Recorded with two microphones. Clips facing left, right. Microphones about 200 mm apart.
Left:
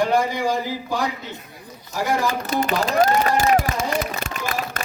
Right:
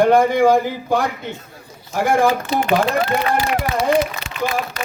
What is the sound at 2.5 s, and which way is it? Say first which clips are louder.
Speech: right 3 dB; 40° left (ahead or behind).